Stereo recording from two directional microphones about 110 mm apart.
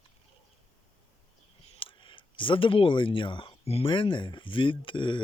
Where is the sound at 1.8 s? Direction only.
50° left (ahead or behind).